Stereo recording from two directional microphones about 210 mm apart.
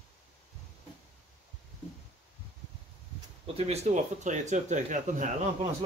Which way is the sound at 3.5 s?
30° right (ahead or behind).